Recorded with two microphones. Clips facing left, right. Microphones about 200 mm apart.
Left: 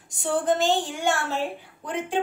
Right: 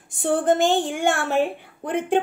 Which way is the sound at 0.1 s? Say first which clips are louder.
Right 4 dB; 55° right (ahead or behind).